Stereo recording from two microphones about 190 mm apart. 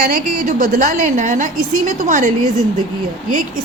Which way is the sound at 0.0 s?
50° right (ahead or behind).